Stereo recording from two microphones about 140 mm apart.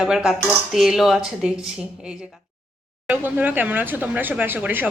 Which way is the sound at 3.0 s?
10° right (ahead or behind).